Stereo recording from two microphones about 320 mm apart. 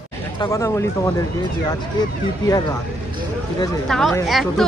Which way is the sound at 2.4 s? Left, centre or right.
Centre.